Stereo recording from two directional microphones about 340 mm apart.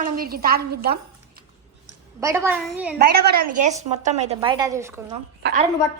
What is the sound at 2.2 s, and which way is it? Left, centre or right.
Speech, centre.